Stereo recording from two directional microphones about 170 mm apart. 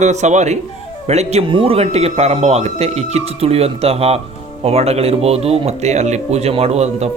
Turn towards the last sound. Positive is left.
turn(degrees=-40)  # may be behind; listen again after turning